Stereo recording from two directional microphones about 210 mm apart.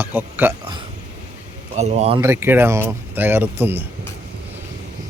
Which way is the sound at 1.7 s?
30° right (ahead or behind).